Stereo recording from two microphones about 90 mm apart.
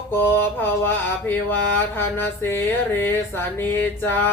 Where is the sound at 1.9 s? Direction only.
25° left (ahead or behind).